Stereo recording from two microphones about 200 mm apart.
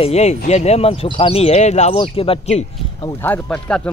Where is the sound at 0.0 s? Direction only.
35° left (ahead or behind).